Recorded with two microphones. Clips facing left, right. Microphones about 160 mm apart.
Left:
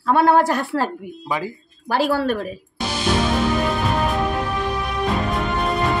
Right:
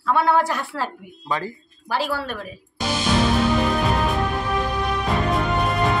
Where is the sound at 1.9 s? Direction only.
45° left (ahead or behind).